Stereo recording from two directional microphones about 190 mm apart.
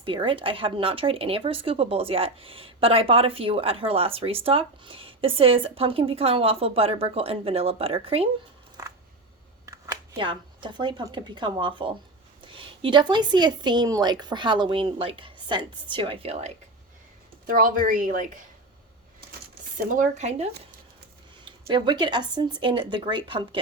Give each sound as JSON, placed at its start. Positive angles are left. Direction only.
{"t": 0.0, "sound": "speech", "side_deg": -25}
{"t": 8.8, "sound": "a sound", "side_deg": -20}
{"t": 9.6, "sound": "speech", "side_deg": -15}
{"t": 17.4, "sound": "speech", "side_deg": -45}
{"t": 19.7, "sound": "speech", "side_deg": -40}
{"t": 21.7, "sound": "speech", "side_deg": -25}